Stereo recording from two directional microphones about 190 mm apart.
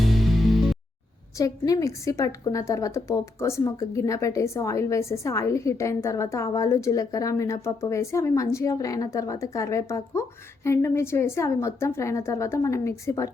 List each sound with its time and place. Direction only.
0.0 s music: centre (ahead or behind)
1.4 s a woman's voice: 15° left (ahead or behind)